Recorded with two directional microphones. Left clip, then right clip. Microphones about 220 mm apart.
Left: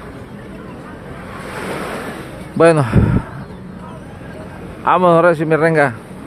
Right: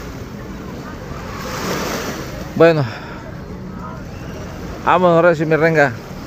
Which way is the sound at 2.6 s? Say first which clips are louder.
Left 1 dB; 15° left (ahead or behind).